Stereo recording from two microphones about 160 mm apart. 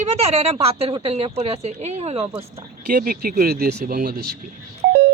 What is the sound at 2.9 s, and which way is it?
Speech, 65° right (ahead or behind).